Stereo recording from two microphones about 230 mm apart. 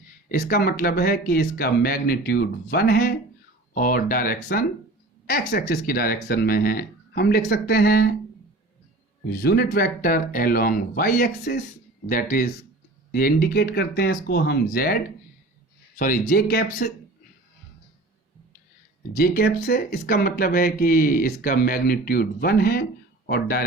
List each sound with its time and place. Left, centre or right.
0.3 s speech: left
9.2 s speech: left
19.1 s speech: left